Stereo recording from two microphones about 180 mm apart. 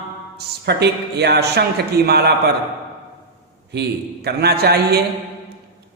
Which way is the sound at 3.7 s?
65° right (ahead or behind).